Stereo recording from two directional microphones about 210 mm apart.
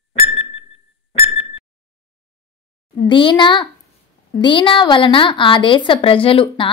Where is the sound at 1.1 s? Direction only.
25° left (ahead or behind).